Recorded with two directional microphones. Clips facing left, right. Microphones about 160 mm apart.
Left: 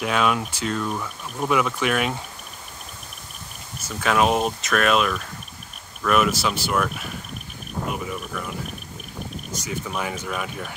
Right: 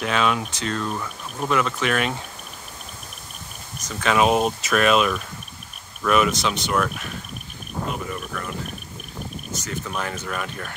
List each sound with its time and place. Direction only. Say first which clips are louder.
0.0 s speech: even; 5° left (ahead or behind)
3.8 s speech: right 1 dB; centre (ahead or behind)
9.5 s speech: left 1 dB; 10° left (ahead or behind)